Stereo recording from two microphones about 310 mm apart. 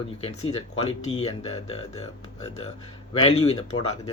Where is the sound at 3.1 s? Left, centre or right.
Centre.